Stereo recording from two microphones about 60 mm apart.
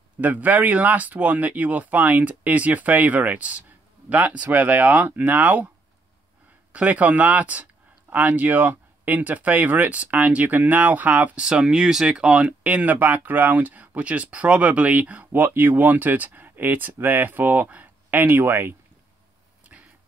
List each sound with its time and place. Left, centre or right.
0.2 s speech: right
6.7 s speech: right
11.3 s speech: centre
12.4 s speech: right